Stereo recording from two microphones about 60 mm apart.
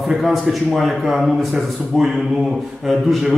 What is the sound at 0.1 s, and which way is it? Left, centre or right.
A man's voice, centre.